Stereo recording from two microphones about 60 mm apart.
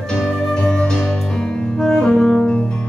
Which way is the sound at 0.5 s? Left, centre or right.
Centre.